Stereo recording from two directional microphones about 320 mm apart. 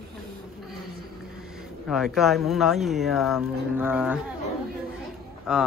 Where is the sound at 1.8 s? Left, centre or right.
Centre.